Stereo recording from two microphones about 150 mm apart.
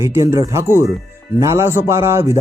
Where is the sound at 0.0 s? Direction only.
20° right (ahead or behind).